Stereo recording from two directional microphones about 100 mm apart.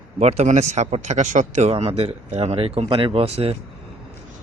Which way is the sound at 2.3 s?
80° right.